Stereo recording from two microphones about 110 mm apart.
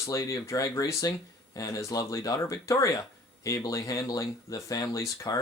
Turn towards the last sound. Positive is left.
turn(degrees=30)  # may be behind; listen again after turning